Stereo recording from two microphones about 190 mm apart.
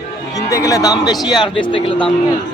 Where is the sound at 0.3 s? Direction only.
15° left (ahead or behind).